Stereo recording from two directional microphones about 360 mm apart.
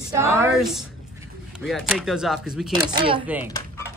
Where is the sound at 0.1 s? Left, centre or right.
Centre.